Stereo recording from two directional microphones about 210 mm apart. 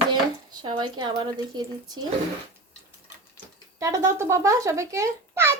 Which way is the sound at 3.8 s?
15° right (ahead or behind).